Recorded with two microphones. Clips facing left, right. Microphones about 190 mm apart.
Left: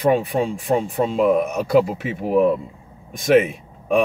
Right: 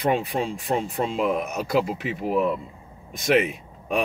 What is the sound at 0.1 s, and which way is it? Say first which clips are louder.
A man's voice: left 5 dB; 50° left (ahead or behind).